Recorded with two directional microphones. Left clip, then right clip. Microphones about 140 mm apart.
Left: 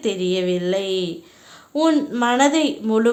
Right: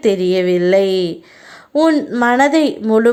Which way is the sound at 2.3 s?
40° right (ahead or behind).